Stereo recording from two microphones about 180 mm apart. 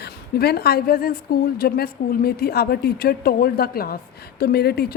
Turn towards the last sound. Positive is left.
turn(degrees=60)  # may be behind; listen again after turning